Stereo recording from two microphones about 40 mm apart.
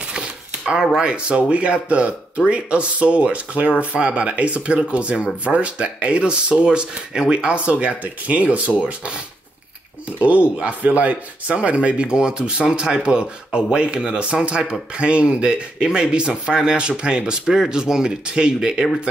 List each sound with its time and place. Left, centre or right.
0.1 s a sound: right
1.0 s speech: right
10.2 s speech: right; by 18.9 s centre